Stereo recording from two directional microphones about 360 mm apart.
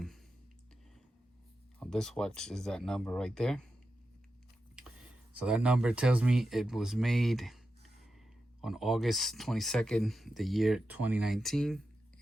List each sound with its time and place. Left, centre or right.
1.8 s speech: centre
5.3 s speech: centre
8.6 s speech: centre